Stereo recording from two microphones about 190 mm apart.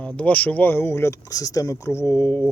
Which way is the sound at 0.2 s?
5° left (ahead or behind).